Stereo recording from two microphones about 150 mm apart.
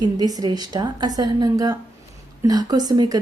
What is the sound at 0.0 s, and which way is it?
A woman's voice, 25° right (ahead or behind).